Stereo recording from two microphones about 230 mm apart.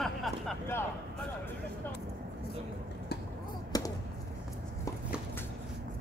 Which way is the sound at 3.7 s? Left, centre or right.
Centre.